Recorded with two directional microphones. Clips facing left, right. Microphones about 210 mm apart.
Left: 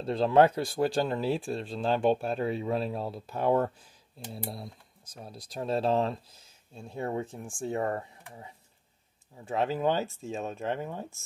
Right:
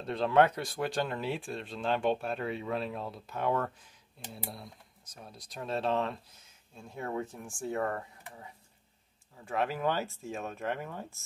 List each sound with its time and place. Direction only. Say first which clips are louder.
0.0 s speech: left 4 dB; 30° left (ahead or behind)
5.1 s speech: left 6 dB; 30° left (ahead or behind)